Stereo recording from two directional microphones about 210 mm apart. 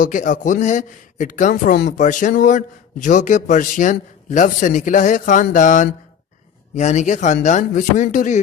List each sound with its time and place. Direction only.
0.0 s speech: 40° left (ahead or behind)